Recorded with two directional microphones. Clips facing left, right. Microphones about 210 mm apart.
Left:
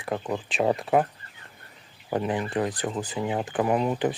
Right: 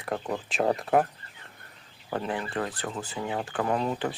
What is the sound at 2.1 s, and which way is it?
Speech, 15° left (ahead or behind).